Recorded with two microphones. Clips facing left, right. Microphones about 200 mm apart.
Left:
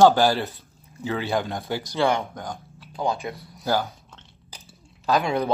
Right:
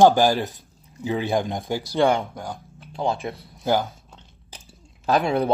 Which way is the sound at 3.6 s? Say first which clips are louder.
Right 2 dB; 15° right (ahead or behind).